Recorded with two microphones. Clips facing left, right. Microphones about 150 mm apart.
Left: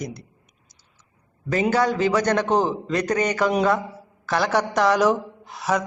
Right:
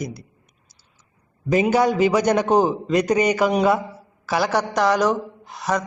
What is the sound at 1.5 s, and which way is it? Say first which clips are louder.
A man's voice: right 3 dB; 15° right (ahead or behind).